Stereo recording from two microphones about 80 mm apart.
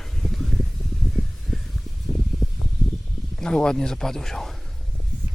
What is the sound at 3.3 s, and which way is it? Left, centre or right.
A man's voice, centre.